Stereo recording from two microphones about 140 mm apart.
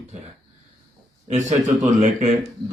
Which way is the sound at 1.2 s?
60° right (ahead or behind).